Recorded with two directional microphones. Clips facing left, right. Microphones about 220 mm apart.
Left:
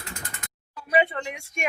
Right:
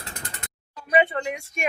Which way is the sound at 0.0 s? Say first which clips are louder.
Right 1 dB; 35° right (ahead or behind).